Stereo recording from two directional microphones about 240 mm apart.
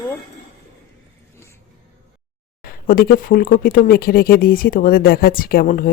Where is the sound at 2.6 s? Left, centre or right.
Left.